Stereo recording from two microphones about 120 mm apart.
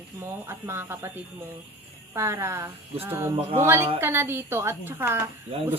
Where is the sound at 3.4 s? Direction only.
60° right (ahead or behind).